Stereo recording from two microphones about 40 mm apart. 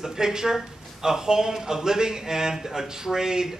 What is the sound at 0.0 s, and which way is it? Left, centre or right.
Speech, centre.